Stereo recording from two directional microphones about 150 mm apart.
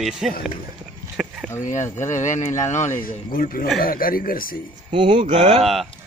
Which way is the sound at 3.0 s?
70° left (ahead or behind).